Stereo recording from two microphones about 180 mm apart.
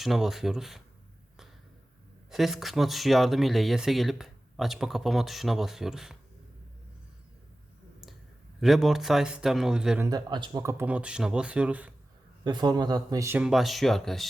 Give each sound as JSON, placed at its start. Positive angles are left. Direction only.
{"t": 0.0, "sound": "speech", "side_deg": 0}
{"t": 2.3, "sound": "speech", "side_deg": 0}
{"t": 8.6, "sound": "speech", "side_deg": 0}
{"t": 10.1, "sound": "speech", "side_deg": -25}
{"t": 12.5, "sound": "speech", "side_deg": -25}
{"t": 13.4, "sound": "speech", "side_deg": 0}